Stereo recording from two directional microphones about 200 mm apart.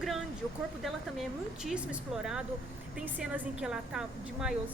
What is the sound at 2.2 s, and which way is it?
Speech, 5° right (ahead or behind).